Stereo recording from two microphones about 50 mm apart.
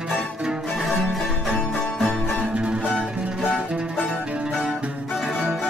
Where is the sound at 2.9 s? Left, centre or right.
Centre.